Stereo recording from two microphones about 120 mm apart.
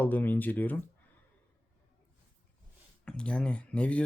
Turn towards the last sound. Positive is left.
turn(degrees=10)  # may be behind; listen again after turning